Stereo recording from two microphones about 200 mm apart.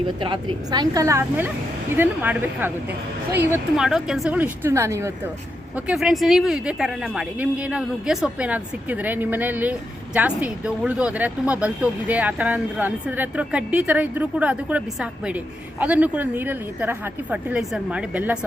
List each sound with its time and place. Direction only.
0.7 s speech: 20° right (ahead or behind)